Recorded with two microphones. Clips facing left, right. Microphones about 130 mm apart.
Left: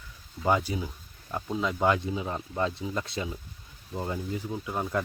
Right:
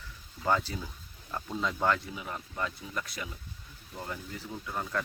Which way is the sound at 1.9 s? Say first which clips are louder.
Left 4 dB; 20° left (ahead or behind).